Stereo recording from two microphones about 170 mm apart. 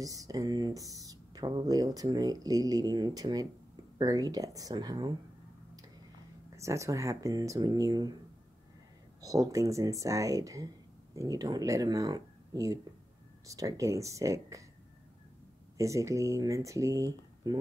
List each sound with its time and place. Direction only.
0.0 s speech: 20° right (ahead or behind)
6.5 s speech: 15° right (ahead or behind)
9.2 s speech: 20° right (ahead or behind)
15.8 s speech: 20° right (ahead or behind)